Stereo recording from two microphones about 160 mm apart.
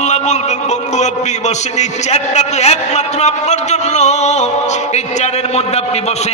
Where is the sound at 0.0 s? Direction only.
45° left (ahead or behind).